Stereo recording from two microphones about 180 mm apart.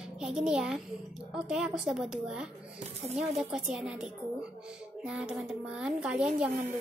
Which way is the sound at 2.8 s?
35° right (ahead or behind).